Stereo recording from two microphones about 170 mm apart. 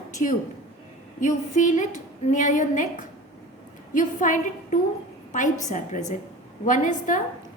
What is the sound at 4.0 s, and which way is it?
A woman's voice, 50° left (ahead or behind).